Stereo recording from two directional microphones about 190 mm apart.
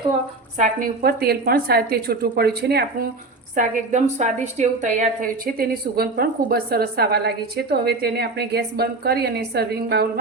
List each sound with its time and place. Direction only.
0.6 s a woman's voice: 50° right (ahead or behind)
3.5 s a woman's voice: 40° right (ahead or behind); by 10.1 s 60° right (ahead or behind)